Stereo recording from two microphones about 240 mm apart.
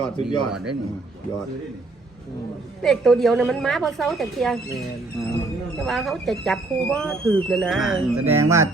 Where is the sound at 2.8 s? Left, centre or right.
Centre.